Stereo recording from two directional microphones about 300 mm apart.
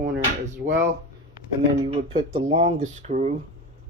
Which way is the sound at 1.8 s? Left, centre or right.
Right.